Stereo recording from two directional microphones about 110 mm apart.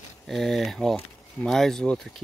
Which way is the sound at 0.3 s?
Centre (ahead or behind).